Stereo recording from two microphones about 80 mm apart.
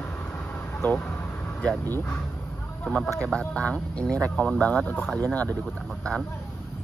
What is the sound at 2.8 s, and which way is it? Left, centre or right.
Speech, centre.